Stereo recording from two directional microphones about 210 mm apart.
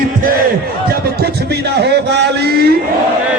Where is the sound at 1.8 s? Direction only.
50° right (ahead or behind).